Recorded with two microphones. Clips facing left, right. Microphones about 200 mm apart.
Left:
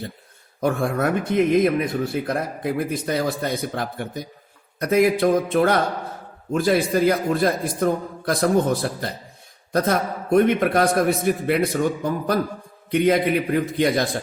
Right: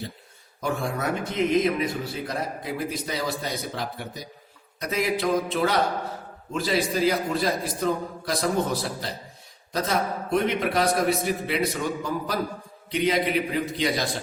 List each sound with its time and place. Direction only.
0.6 s a man's voice: 55° left (ahead or behind)
12.9 s a man's voice: 55° left (ahead or behind)